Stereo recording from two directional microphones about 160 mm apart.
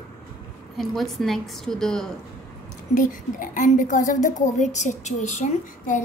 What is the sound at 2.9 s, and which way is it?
A woman's voice, 55° left (ahead or behind).